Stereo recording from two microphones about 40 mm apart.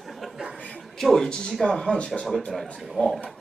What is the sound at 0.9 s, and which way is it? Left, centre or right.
Speech, centre.